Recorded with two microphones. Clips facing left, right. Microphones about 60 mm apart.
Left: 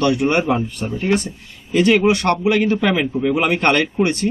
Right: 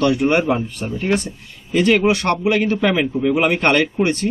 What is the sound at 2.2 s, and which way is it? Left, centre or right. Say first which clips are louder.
Speech: left 1 dB; centre.